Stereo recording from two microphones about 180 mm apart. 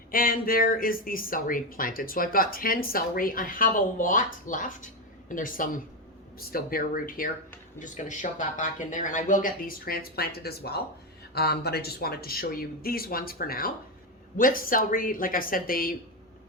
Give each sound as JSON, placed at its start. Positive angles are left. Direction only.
{"t": 0.1, "sound": "speech", "side_deg": 55}